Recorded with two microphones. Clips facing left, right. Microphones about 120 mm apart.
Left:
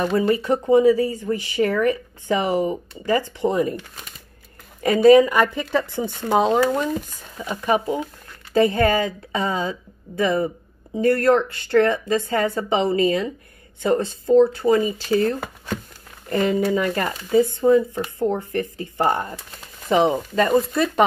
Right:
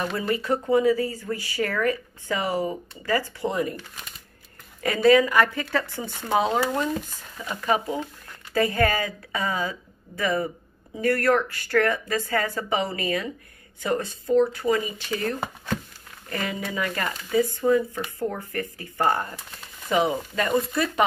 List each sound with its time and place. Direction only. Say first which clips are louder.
0.0 s speech: left 7 dB; 25° left (ahead or behind)
4.8 s speech: left 6 dB; 20° left (ahead or behind)